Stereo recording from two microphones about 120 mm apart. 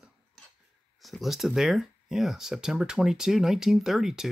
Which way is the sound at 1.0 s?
Centre (ahead or behind).